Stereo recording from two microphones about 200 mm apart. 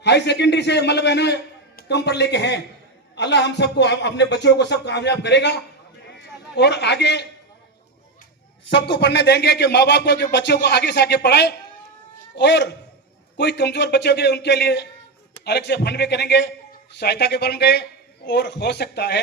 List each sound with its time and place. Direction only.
0.0 s a man's voice: 60° left (ahead or behind)
8.6 s speech: 60° left (ahead or behind)